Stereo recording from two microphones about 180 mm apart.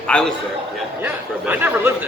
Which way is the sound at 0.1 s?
5° left (ahead or behind).